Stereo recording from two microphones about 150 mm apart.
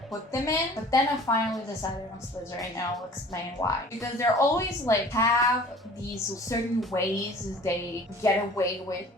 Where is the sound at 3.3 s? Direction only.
20° left (ahead or behind).